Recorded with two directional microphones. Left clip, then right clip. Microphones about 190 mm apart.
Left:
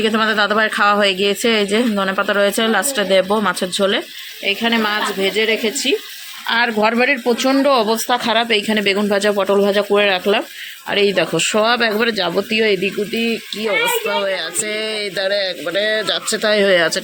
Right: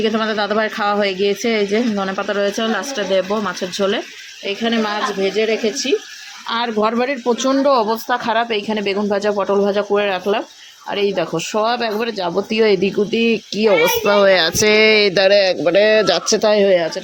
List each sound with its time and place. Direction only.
0.0 s speech: centre (ahead or behind)
12.5 s speech: 20° right (ahead or behind); by 16.2 s 35° right (ahead or behind)
16.3 s speech: 20° right (ahead or behind)
16.6 s speech: 5° left (ahead or behind)